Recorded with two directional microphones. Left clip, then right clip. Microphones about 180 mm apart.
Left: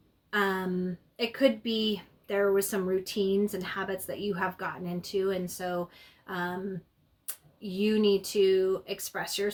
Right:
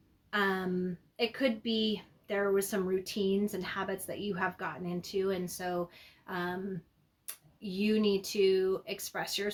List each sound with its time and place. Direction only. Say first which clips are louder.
0.3 s a sound: left 3 dB; 20° right (ahead or behind)
1.1 s speech: left 5 dB; 20° right (ahead or behind)
7.6 s speech: left 4 dB; 25° right (ahead or behind)